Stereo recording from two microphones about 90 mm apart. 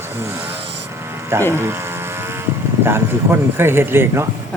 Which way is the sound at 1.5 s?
25° right (ahead or behind).